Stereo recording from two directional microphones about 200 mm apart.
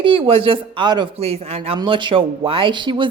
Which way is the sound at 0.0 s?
25° right (ahead or behind).